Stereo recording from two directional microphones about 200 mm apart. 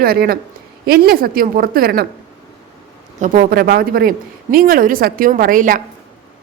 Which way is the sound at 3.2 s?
45° right (ahead or behind).